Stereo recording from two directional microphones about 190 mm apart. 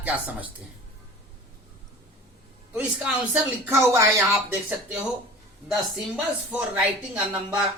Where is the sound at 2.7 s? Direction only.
5° right (ahead or behind).